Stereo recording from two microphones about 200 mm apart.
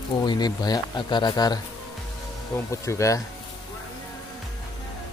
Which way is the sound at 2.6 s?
15° left (ahead or behind).